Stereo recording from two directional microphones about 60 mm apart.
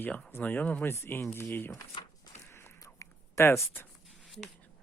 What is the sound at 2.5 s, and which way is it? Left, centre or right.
Biting, left.